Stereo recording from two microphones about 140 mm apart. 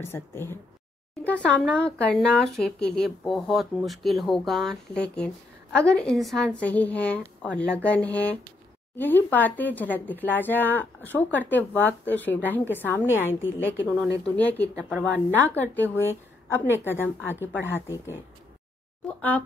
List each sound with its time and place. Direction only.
0.0 s speech: 20° left (ahead or behind)